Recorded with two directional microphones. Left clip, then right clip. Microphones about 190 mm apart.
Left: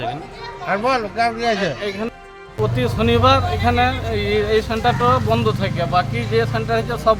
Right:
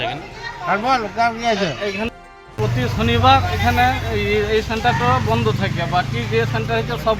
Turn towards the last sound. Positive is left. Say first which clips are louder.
# left 2 dB
turn(degrees=25)  # may be behind; listen again after turning